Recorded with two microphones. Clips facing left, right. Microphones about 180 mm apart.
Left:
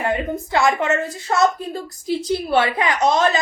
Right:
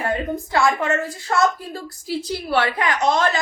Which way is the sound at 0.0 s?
20° left (ahead or behind).